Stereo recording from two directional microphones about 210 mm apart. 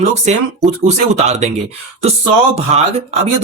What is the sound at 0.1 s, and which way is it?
Speech, 30° right (ahead or behind).